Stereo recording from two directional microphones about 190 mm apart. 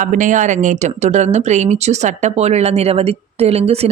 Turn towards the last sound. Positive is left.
turn(degrees=-35)  # may be behind; listen again after turning